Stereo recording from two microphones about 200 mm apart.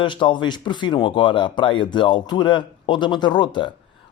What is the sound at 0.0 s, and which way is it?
Speech, 25° left (ahead or behind).